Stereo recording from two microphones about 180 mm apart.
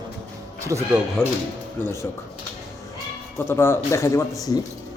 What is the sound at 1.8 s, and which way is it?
Speech, 15° left (ahead or behind).